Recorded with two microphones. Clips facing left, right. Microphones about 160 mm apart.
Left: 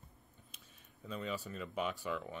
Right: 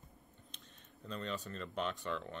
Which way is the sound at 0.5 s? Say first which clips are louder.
Right 3 dB; 5° left (ahead or behind).